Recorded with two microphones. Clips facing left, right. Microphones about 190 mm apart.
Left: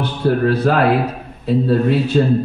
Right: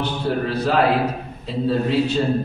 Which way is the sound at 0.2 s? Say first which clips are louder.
Left 7 dB; 60° left (ahead or behind).